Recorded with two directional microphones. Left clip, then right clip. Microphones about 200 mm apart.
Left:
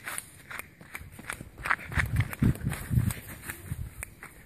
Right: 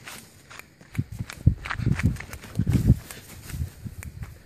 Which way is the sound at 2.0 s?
5° left (ahead or behind).